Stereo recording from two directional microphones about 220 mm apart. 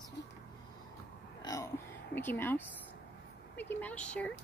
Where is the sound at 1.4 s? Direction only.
15° left (ahead or behind).